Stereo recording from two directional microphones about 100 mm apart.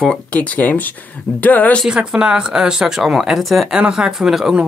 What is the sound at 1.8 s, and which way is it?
Speech, 10° right (ahead or behind).